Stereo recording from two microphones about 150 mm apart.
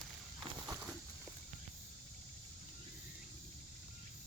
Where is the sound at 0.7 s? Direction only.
15° right (ahead or behind).